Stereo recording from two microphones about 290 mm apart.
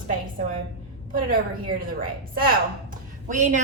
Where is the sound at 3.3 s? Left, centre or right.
Right.